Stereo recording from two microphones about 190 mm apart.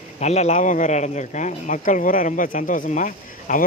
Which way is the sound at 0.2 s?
35° left (ahead or behind).